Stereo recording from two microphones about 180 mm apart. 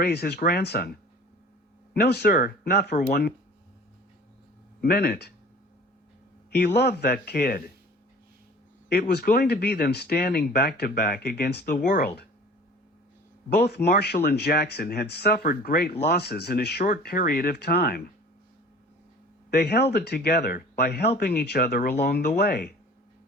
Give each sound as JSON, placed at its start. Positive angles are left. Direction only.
{"t": 0.0, "sound": "speech", "side_deg": 65}
{"t": 1.9, "sound": "speech", "side_deg": 65}
{"t": 4.8, "sound": "speech", "side_deg": 60}
{"t": 6.5, "sound": "speech", "side_deg": 65}
{"t": 8.9, "sound": "speech", "side_deg": 60}
{"t": 13.6, "sound": "speech", "side_deg": 65}
{"t": 19.5, "sound": "speech", "side_deg": 65}